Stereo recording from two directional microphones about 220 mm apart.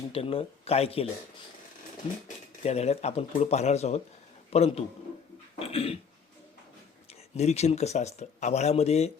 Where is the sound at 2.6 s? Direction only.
30° left (ahead or behind).